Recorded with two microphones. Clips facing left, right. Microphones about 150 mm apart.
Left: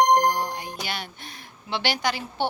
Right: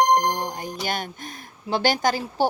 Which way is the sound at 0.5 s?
45° right (ahead or behind).